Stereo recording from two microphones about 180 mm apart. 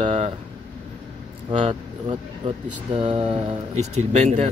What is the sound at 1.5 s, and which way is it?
Speech, 40° right (ahead or behind).